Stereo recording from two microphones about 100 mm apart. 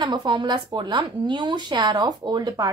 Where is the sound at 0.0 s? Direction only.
45° right (ahead or behind).